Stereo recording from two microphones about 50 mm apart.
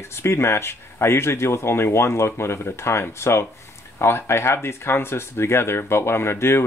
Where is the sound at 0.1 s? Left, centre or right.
Left.